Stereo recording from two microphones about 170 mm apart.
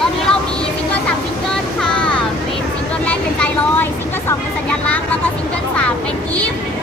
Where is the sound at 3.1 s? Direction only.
10° left (ahead or behind).